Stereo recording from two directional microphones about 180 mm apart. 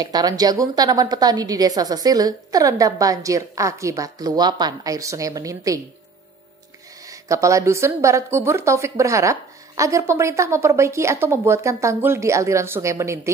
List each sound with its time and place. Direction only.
0.0 s a woman's voice: 20° right (ahead or behind)
7.1 s a woman's voice: 15° right (ahead or behind)